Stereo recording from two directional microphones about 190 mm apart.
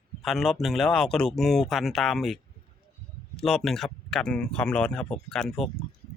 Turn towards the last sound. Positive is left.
turn(degrees=0)  # may be behind; listen again after turning